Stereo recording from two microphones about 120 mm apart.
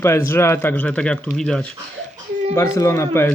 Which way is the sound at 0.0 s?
20° left (ahead or behind).